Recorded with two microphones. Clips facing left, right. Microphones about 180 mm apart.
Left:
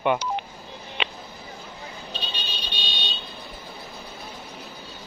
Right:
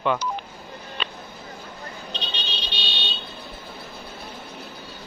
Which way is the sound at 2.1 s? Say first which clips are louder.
Right 2 dB; 10° left (ahead or behind).